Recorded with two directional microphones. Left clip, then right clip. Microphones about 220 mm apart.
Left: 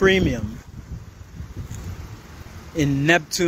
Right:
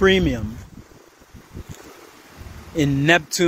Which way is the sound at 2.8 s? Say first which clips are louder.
Right 2 dB; 5° right (ahead or behind).